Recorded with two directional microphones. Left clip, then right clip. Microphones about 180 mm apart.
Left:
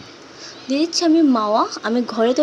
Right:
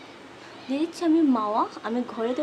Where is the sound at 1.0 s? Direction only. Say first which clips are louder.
Left 5 dB; 25° left (ahead or behind).